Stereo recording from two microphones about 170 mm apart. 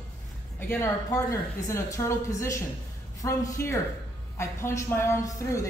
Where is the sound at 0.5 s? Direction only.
10° left (ahead or behind).